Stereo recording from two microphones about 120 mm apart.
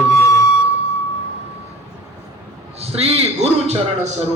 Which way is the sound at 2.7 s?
60° right (ahead or behind).